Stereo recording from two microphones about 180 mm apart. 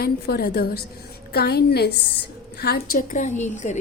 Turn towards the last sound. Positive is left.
turn(degrees=40)  # may be behind; listen again after turning